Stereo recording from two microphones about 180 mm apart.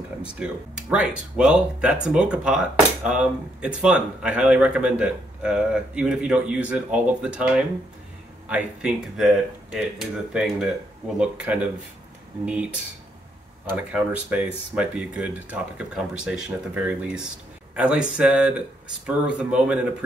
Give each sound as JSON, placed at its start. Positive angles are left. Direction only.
{"t": 0.2, "sound": "speech", "side_deg": -5}
{"t": 13.7, "sound": "speech", "side_deg": -5}